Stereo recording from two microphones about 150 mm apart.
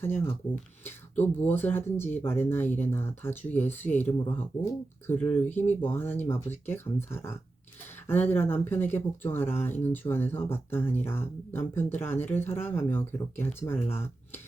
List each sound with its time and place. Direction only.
0.0 s speech: 15° left (ahead or behind)
1.4 s speech: 10° left (ahead or behind)